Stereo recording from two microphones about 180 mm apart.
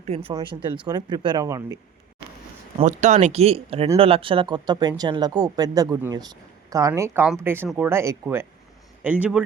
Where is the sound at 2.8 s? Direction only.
45° right (ahead or behind).